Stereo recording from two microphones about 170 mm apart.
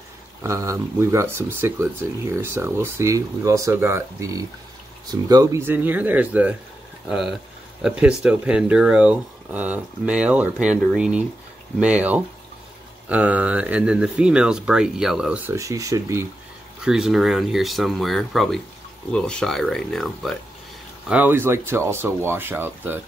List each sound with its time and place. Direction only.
0.4 s speech: 15° right (ahead or behind)
16.8 s speech: 5° right (ahead or behind)
21.1 s speech: 10° right (ahead or behind)